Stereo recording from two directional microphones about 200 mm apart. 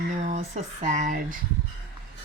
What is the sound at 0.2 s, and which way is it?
Speech, 35° right (ahead or behind).